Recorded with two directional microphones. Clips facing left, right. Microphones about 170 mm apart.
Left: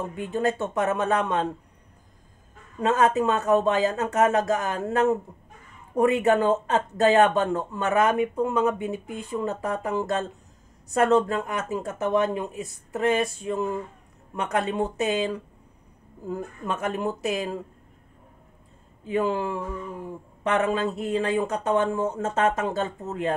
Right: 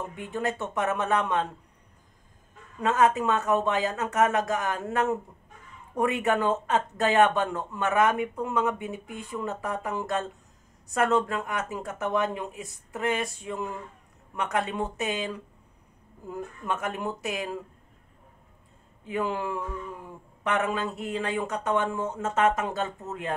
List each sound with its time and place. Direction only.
0.1 s speech: 30° left (ahead or behind)
2.8 s speech: 30° left (ahead or behind)
16.8 s speech: 25° left (ahead or behind)
19.0 s speech: 30° left (ahead or behind)